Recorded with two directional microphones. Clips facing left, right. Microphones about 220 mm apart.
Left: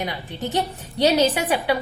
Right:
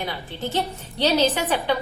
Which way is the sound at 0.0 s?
15° left (ahead or behind).